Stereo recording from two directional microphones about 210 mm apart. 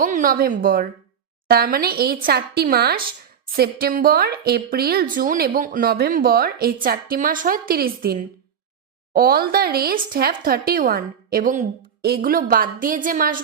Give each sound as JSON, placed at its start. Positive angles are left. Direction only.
{"t": 0.0, "sound": "a woman's voice", "side_deg": -40}